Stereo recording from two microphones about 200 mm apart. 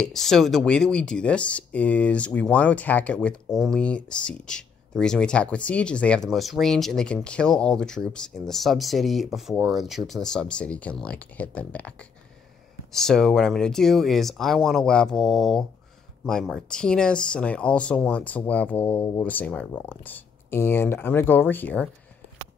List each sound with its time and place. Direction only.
0.0 s speech: centre (ahead or behind)